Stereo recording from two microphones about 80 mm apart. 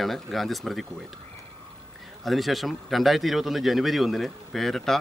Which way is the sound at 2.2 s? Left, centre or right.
Centre.